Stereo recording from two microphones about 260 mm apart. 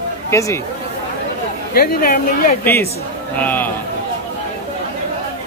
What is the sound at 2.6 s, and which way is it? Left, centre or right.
Speech, centre.